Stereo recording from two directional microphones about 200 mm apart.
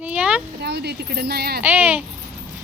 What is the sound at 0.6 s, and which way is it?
Speech, 55° right (ahead or behind).